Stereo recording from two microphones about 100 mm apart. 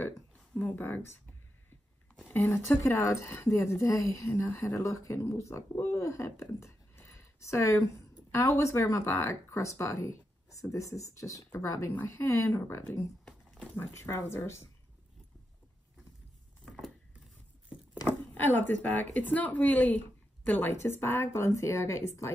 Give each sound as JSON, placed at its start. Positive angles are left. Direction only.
{"t": 0.6, "sound": "speech", "side_deg": 15}
{"t": 11.9, "sound": "speech", "side_deg": 20}
{"t": 16.6, "sound": "a sound", "side_deg": 0}
{"t": 18.0, "sound": "speech", "side_deg": 20}